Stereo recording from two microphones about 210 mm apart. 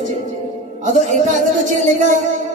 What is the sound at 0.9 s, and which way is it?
Speech, 35° right (ahead or behind).